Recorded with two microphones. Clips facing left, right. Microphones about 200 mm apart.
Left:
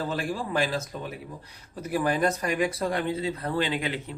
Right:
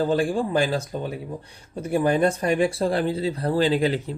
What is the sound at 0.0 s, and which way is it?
Speech, 30° right (ahead or behind).